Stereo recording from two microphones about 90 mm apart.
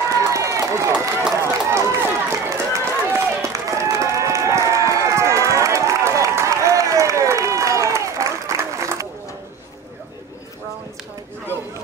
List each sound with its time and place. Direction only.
0.2 s run: 35° right (ahead or behind)